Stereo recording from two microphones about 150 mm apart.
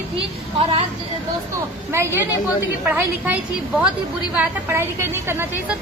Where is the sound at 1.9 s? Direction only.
15° right (ahead or behind).